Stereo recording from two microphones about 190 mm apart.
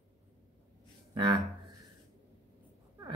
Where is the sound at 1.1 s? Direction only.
25° right (ahead or behind).